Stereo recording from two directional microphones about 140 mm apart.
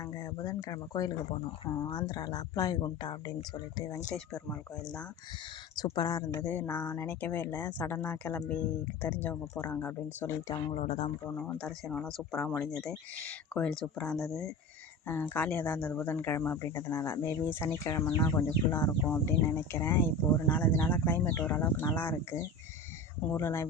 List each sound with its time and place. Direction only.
0.0 s speech: 25° left (ahead or behind)
5.7 s speech: 30° left (ahead or behind)
6.4 s speech: 10° left (ahead or behind)
10.8 s speech: 45° left (ahead or behind)
11.3 s speech: 10° left (ahead or behind)
15.0 s speech: 15° left (ahead or behind)